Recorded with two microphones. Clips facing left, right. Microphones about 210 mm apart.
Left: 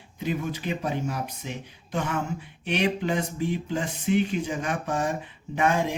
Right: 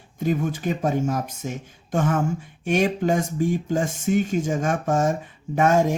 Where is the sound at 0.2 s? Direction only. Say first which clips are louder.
Right 5 dB; 45° right (ahead or behind).